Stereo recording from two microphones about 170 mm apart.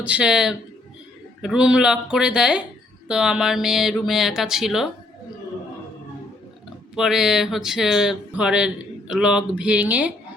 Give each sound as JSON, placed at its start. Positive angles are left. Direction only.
{"t": 0.0, "sound": "speech", "side_deg": -5}
{"t": 6.9, "sound": "speech", "side_deg": -5}